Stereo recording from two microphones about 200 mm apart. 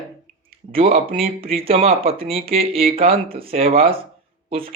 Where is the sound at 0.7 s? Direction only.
30° right (ahead or behind).